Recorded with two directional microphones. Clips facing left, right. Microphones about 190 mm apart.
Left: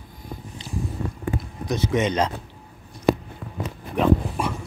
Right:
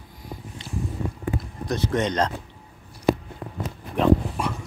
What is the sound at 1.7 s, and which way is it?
Speech, centre (ahead or behind).